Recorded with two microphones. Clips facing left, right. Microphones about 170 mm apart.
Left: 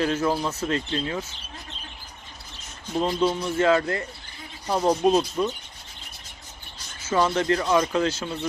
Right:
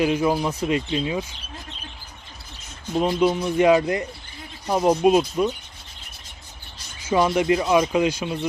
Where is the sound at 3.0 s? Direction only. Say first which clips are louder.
Right 3 dB; 15° right (ahead or behind).